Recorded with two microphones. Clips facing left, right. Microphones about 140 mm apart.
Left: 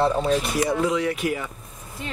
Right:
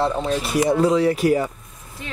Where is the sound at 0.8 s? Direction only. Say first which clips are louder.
Right 6 dB; 35° right (ahead or behind).